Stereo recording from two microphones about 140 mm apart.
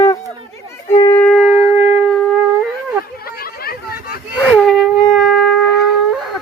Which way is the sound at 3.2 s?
90° left.